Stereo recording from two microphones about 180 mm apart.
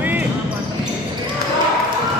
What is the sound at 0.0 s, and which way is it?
Basketball bounce, 10° right (ahead or behind).